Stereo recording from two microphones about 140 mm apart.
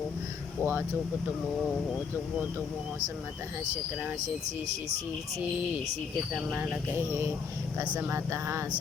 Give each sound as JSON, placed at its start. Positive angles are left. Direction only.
{"t": 0.6, "sound": "speech", "side_deg": -15}
{"t": 4.2, "sound": "speech", "side_deg": -55}
{"t": 6.3, "sound": "speech", "side_deg": -10}